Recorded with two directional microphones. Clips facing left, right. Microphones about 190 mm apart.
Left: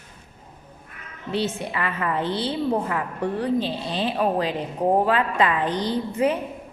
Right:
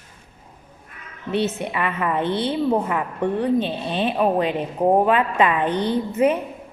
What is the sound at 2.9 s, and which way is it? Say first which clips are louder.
Speech: right 3 dB; 20° right (ahead or behind).